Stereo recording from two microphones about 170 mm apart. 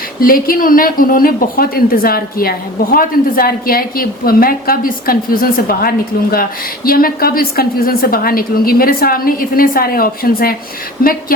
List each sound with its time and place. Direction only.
0.2 s a woman's voice: 55° left (ahead or behind)